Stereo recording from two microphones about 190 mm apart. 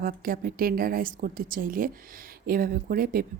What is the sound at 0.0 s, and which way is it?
Speech, 50° right (ahead or behind).